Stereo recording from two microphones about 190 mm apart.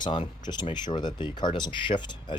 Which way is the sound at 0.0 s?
25° left (ahead or behind).